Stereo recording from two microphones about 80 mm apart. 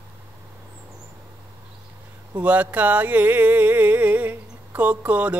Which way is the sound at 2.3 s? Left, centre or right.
Centre.